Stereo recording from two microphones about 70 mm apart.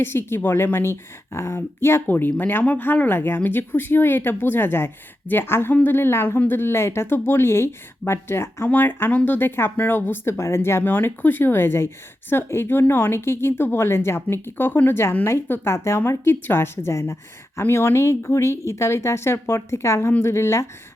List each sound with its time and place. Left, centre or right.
0.0 s a woman's voice: left
8.7 s a woman's voice: left